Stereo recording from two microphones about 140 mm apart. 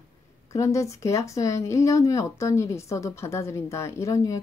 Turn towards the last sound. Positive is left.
turn(degrees=20)  # may be behind; listen again after turning